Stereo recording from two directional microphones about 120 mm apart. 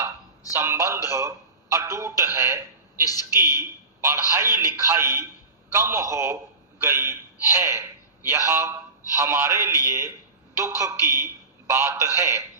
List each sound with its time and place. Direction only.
0.5 s a sound: 20° right (ahead or behind)
3.0 s speech: 30° left (ahead or behind)
3.2 s a man's voice: 20° right (ahead or behind)